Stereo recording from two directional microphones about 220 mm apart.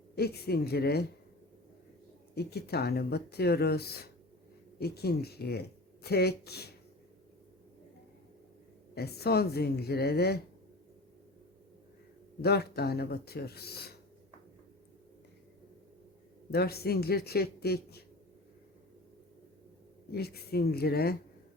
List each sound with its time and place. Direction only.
0.2 s speech: 45° left (ahead or behind)
2.3 s speech: 45° left (ahead or behind)
9.0 s speech: 45° left (ahead or behind)
12.4 s speech: 45° left (ahead or behind)
16.5 s speech: 45° left (ahead or behind)
20.1 s speech: 45° left (ahead or behind)